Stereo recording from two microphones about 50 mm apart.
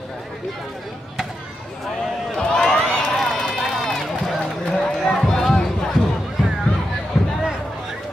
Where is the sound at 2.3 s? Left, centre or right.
Centre.